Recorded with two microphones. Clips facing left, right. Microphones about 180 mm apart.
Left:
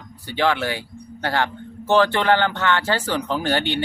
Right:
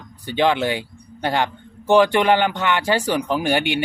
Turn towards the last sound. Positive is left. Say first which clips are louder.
# right 2 dB
turn(degrees=-15)  # may be behind; listen again after turning